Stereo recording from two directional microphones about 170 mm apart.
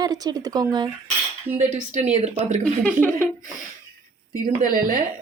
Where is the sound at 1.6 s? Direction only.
45° right (ahead or behind).